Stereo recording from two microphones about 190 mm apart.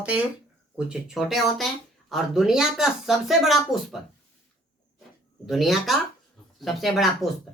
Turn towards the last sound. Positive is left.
turn(degrees=0)  # may be behind; listen again after turning